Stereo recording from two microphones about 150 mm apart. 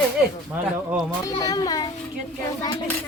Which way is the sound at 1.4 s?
25° left (ahead or behind).